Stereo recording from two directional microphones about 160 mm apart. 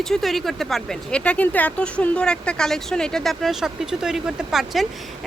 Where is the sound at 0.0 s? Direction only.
Centre (ahead or behind).